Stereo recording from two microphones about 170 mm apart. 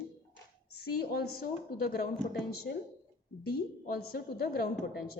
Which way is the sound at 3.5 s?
65° left (ahead or behind).